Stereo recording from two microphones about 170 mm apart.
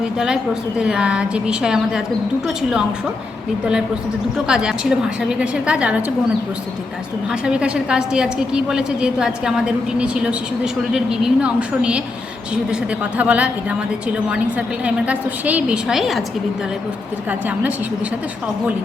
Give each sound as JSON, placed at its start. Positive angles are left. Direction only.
{"t": 0.8, "sound": "a woman's voice", "side_deg": -5}
{"t": 4.4, "sound": "a woman's voice", "side_deg": -5}
{"t": 7.4, "sound": "a woman's voice", "side_deg": -5}
{"t": 13.1, "sound": "speech", "side_deg": -10}
{"t": 14.8, "sound": "a woman's voice", "side_deg": -5}